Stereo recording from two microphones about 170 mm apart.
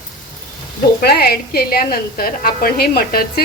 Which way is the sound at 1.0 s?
65° left (ahead or behind).